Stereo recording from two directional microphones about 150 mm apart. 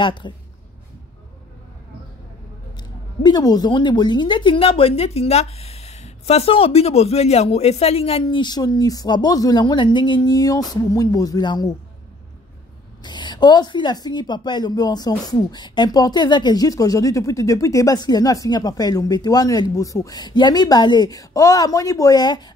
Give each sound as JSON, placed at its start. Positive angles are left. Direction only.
{"t": 0.0, "sound": "speech", "side_deg": 30}
{"t": 3.2, "sound": "speech", "side_deg": 25}
{"t": 13.0, "sound": "a woman's voice", "side_deg": 30}